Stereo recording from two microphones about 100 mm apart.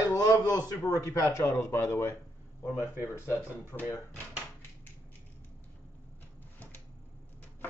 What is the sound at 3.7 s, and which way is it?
Speech, 25° left (ahead or behind).